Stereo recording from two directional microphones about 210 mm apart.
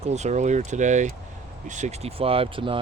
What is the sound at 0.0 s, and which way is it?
Speech, 30° right (ahead or behind).